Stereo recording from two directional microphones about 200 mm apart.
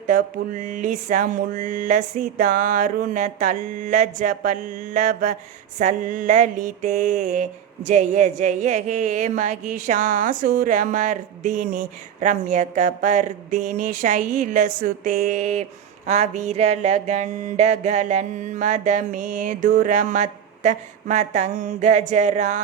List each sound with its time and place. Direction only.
0.1 s speech: 40° right (ahead or behind)